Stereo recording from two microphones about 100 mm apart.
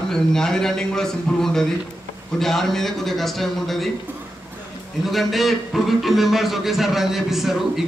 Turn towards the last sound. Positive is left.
turn(degrees=-5)  # may be behind; listen again after turning